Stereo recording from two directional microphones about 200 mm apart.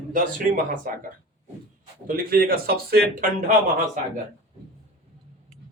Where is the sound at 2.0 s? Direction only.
45° right (ahead or behind).